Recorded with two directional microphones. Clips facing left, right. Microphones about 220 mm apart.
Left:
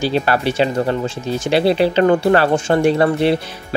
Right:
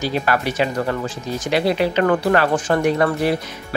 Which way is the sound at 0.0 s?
30° left (ahead or behind).